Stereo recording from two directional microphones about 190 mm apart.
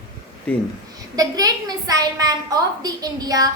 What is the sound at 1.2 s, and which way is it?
A woman's voice, 20° right (ahead or behind).